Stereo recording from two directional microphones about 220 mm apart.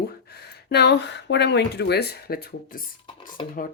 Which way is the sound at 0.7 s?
50° left (ahead or behind).